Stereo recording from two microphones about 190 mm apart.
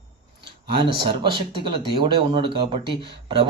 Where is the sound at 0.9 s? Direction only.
25° right (ahead or behind).